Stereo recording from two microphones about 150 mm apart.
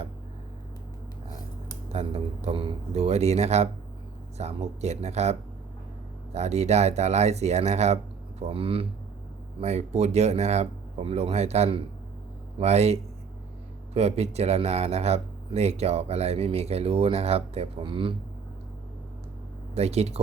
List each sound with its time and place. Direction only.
1.9 s speech: 45° right (ahead or behind)
19.7 s speech: 45° right (ahead or behind)